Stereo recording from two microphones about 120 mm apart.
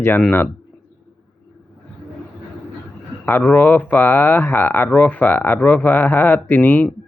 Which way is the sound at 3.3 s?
15° left (ahead or behind).